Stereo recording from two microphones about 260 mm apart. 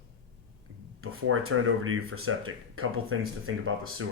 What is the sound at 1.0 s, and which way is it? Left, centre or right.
Speech, right.